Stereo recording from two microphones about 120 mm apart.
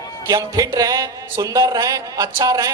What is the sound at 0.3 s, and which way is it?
A man's voice, 30° right (ahead or behind).